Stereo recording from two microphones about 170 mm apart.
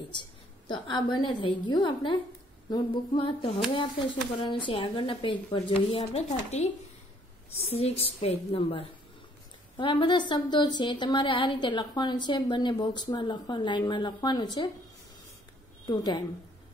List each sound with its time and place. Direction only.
0.7 s a woman's voice: 25° left (ahead or behind)
15.9 s a woman's voice: 25° left (ahead or behind)